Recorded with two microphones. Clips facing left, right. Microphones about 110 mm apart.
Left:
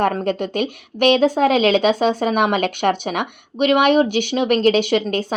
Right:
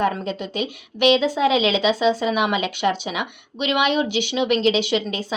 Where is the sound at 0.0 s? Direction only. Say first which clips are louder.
Left 4 dB; 50° left (ahead or behind).